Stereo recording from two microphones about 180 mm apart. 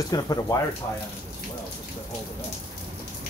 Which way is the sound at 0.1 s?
20° left (ahead or behind).